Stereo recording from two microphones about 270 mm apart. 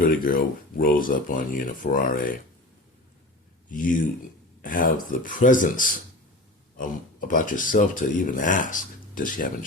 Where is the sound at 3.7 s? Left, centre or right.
Left.